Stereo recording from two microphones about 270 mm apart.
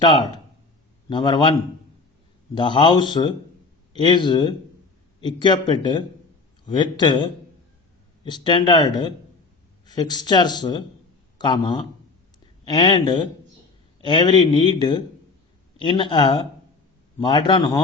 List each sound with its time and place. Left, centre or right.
1.1 s speech: centre
2.6 s speech: centre